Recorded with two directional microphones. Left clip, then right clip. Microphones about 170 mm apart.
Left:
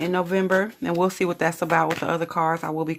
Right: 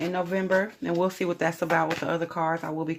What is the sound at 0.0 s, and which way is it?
Speech, 40° left (ahead or behind).